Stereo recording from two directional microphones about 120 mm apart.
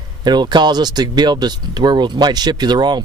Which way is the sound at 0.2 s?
35° right (ahead or behind).